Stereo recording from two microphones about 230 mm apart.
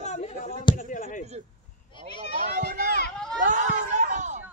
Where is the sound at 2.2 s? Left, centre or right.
Right.